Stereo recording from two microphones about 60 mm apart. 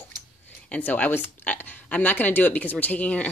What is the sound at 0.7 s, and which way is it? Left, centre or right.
Speech, left.